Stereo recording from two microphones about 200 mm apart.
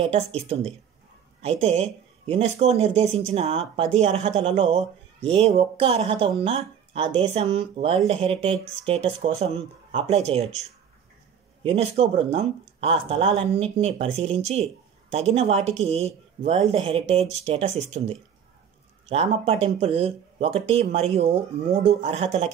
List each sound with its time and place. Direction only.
0.0 s speech: 30° right (ahead or behind)
11.6 s speech: 30° right (ahead or behind)